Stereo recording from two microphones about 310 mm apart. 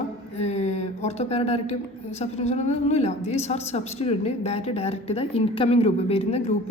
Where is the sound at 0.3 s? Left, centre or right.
Left.